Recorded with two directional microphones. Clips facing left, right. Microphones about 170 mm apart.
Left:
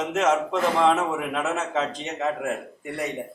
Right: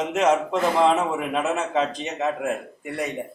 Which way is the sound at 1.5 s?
15° right (ahead or behind).